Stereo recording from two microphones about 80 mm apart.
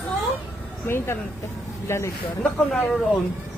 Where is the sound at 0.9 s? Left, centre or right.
Left.